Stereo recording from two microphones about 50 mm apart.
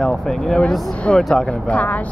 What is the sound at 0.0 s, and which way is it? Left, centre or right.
Speech, centre.